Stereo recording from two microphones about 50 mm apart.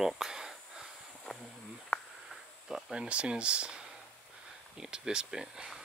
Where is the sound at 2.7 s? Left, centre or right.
Centre.